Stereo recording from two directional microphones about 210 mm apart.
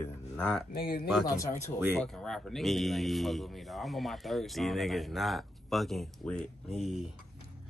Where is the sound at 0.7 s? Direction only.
45° left (ahead or behind).